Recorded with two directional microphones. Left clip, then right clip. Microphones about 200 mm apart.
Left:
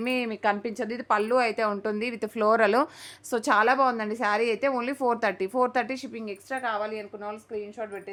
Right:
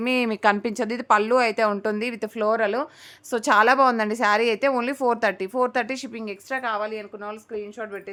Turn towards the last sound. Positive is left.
turn(degrees=-20)  # may be behind; listen again after turning